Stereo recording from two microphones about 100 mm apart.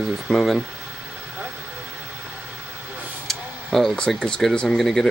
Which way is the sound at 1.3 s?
20° right (ahead or behind).